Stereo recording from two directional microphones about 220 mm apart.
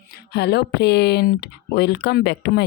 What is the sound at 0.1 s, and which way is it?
Speech, 50° left (ahead or behind).